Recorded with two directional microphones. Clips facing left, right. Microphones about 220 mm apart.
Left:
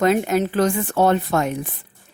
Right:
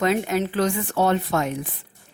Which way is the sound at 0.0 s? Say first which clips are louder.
Left 4 dB; 45° left (ahead or behind).